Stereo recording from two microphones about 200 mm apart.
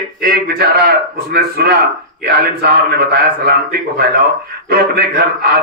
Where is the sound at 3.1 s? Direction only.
50° right (ahead or behind).